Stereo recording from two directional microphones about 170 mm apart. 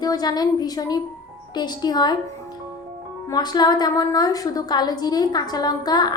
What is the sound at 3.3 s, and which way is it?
A woman's voice, 25° left (ahead or behind).